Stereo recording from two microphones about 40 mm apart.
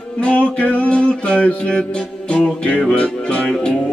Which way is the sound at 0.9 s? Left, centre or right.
Left.